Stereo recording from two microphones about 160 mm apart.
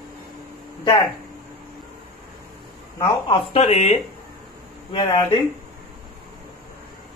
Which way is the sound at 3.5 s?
40° left (ahead or behind).